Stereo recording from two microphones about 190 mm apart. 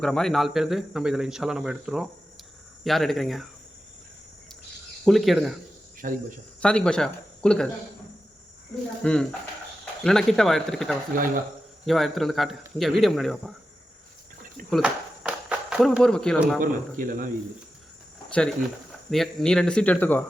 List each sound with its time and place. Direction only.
0.0 s speech: 5° left (ahead or behind)
5.0 s speech: centre (ahead or behind)
6.0 s speech: 45° right (ahead or behind)
6.6 s speech: 5° left (ahead or behind)
9.0 s speech: 5° left (ahead or behind)
11.1 s speech: 45° right (ahead or behind)
11.9 s speech: centre (ahead or behind)
14.7 s walk: 5° right (ahead or behind)
16.6 s speech: 45° right (ahead or behind)
18.3 s speech: centre (ahead or behind)